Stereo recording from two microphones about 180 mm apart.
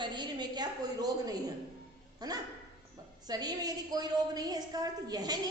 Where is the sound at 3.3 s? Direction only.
20° right (ahead or behind).